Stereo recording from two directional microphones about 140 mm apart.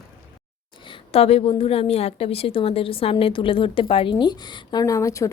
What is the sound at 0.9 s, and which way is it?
A woman's voice, 45° left (ahead or behind).